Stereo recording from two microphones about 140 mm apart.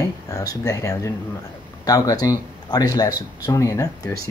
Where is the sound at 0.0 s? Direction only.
25° left (ahead or behind).